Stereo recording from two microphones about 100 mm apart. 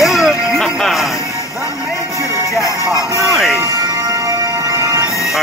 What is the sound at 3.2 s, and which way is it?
Speech, centre (ahead or behind).